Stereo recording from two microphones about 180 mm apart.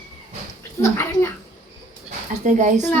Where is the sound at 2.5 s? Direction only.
45° right (ahead or behind).